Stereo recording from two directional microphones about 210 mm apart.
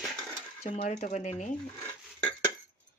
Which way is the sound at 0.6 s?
35° left (ahead or behind).